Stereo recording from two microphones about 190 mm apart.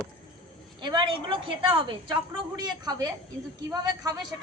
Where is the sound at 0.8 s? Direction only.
25° right (ahead or behind).